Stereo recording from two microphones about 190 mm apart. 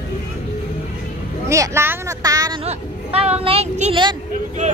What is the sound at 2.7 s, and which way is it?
Speech, 35° right (ahead or behind).